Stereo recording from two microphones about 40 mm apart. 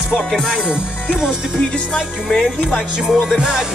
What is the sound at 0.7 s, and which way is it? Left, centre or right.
Music, right.